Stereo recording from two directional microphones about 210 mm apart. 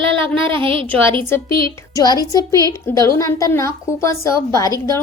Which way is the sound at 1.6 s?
15° left (ahead or behind).